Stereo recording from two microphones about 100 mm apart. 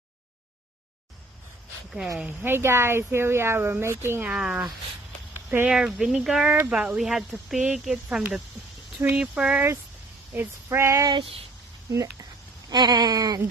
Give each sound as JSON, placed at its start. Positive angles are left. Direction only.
{"t": 2.1, "sound": "a woman's voice", "side_deg": -20}
{"t": 4.3, "sound": "speech", "side_deg": -5}
{"t": 5.3, "sound": "a sound", "side_deg": -20}
{"t": 5.7, "sound": "speech", "side_deg": -10}
{"t": 10.3, "sound": "a woman's voice", "side_deg": -20}
{"t": 11.1, "sound": "a sound", "side_deg": -55}
{"t": 11.9, "sound": "speech", "side_deg": -35}